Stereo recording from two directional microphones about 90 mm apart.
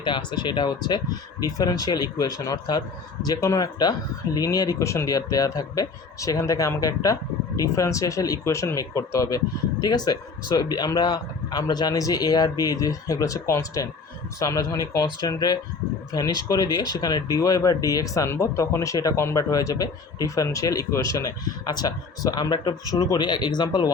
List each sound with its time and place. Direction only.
0.0 s speech: 55° left (ahead or behind); by 9.4 s 40° left (ahead or behind)
9.8 s speech: 50° left (ahead or behind)
23.0 s speech: 40° left (ahead or behind)
23.2 s speech: 55° left (ahead or behind)